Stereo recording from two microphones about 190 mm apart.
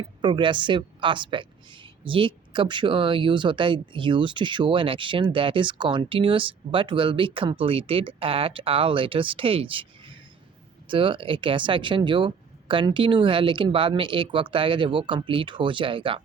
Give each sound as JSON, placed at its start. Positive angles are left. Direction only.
{"t": 0.2, "sound": "a woman's voice", "side_deg": -25}